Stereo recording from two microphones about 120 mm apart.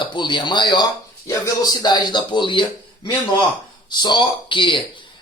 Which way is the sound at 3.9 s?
40° left (ahead or behind).